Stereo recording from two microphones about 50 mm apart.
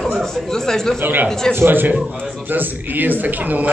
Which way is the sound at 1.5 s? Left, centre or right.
Right.